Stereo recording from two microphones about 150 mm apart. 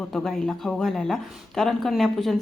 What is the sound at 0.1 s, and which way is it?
Speech, 5° left (ahead or behind).